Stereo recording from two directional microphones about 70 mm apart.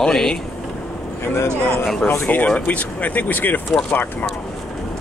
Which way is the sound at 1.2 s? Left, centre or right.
Left.